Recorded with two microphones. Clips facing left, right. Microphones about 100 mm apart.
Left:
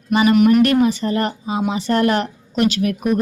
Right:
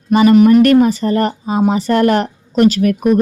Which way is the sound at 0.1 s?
40° right (ahead or behind).